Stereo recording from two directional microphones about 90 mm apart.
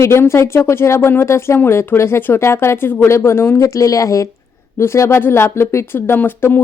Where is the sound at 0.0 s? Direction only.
30° left (ahead or behind).